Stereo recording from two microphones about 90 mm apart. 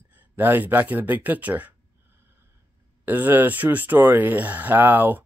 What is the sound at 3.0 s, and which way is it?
Speech, 20° right (ahead or behind).